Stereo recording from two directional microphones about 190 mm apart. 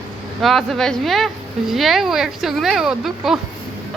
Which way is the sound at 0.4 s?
Centre (ahead or behind).